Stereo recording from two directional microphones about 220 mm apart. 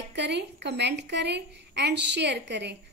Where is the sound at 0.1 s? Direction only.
50° right (ahead or behind).